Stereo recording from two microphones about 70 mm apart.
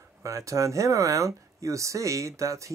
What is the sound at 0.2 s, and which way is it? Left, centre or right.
Speech, right.